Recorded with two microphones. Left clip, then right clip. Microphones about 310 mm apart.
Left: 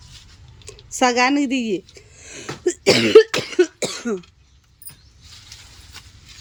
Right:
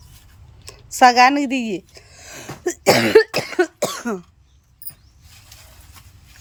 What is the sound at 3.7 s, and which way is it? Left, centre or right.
Cough, centre.